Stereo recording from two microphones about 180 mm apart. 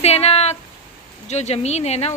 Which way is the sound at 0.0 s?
35° left (ahead or behind).